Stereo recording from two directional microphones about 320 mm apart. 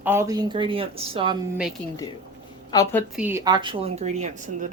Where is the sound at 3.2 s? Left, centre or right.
Centre.